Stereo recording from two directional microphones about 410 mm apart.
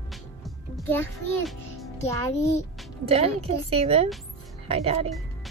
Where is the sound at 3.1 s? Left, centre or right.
Centre.